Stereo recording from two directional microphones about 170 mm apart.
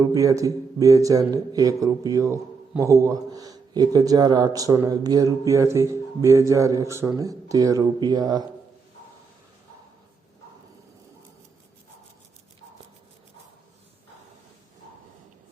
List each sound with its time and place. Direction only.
0.0 s a man's voice: 20° right (ahead or behind)